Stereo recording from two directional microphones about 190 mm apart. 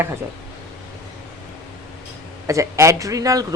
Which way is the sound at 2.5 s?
15° right (ahead or behind).